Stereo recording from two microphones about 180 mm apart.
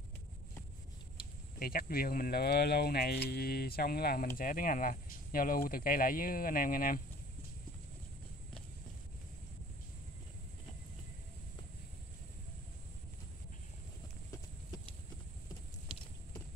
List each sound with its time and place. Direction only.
1.6 s speech: 55° left (ahead or behind)